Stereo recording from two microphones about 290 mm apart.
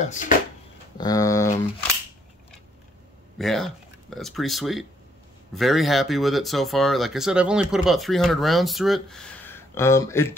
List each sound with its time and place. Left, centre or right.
0.0 s speech: left
0.9 s speech: centre
3.3 s speech: centre